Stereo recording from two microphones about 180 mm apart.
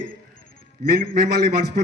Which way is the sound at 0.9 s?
60° right (ahead or behind).